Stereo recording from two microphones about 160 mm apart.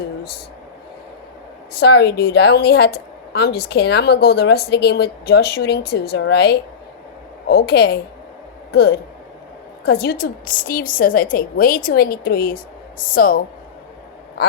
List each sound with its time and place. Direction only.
1.7 s a woman's voice: 90° left; by 12.5 s 75° left (ahead or behind)
13.0 s a woman's voice: 60° left (ahead or behind)